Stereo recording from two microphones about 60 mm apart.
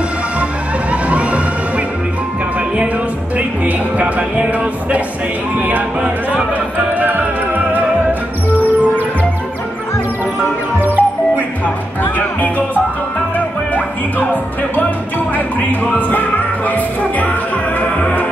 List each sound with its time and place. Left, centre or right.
1.0 s a sound: right
3.3 s music: right
5.6 s music: right
6.9 s music: right
10.8 s music: right
11.6 s music: left